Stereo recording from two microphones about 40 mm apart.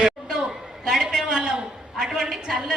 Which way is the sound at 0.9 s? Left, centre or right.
Centre.